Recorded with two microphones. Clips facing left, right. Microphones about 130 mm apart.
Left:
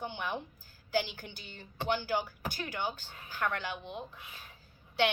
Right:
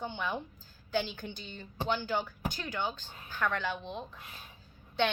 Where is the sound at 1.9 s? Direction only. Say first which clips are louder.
Left 1 dB; 15° left (ahead or behind).